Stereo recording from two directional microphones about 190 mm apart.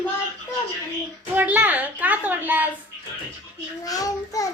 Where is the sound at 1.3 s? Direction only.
10° right (ahead or behind).